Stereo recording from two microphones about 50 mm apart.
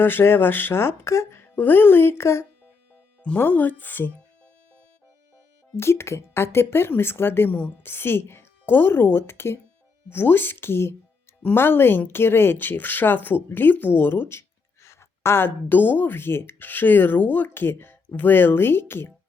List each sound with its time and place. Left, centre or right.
0.0 s speech: left
1.4 s speech: left
3.4 s speech: left
5.7 s speech: left
10.1 s speech: left
14.8 s a sound: left
15.4 s speech: left